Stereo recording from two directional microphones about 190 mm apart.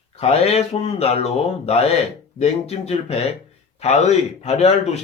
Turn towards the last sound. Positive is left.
turn(degrees=35)  # may be behind; listen again after turning